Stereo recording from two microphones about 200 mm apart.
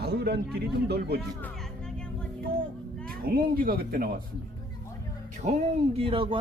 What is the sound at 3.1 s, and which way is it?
Speech, 45° right (ahead or behind).